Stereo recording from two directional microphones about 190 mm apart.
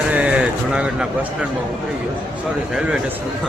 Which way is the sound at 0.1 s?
5° right (ahead or behind).